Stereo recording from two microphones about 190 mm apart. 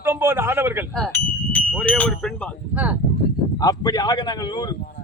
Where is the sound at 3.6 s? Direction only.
20° left (ahead or behind).